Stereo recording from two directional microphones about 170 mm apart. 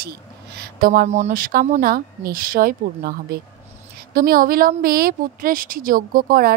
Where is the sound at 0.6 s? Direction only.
60° right (ahead or behind).